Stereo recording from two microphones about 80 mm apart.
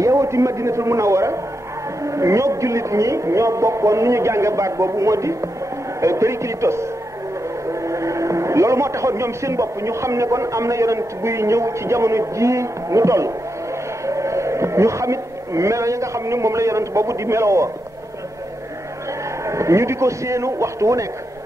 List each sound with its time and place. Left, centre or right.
0.0 s a man's voice: right
19.4 s a man's voice: right